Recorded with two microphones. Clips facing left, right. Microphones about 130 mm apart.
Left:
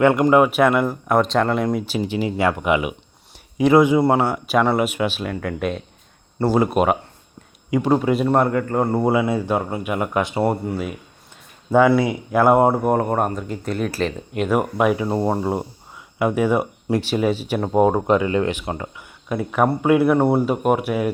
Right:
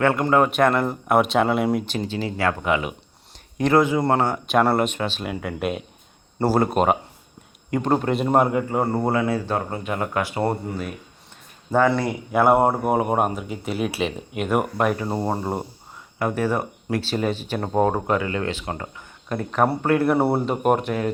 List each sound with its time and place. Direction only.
0.0 s speech: 15° left (ahead or behind); by 1.8 s 5° right (ahead or behind)
1.8 s speech: 10° left (ahead or behind)
5.2 s speech: 5° right (ahead or behind)
6.6 s speech: 5° left (ahead or behind)
8.3 s speech: 15° right (ahead or behind); by 10.4 s 20° left (ahead or behind)
10.4 s speech: centre (ahead or behind)
20.1 s speech: 5° right (ahead or behind)